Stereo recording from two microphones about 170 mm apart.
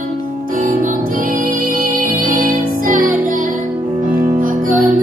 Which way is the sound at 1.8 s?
55° right (ahead or behind).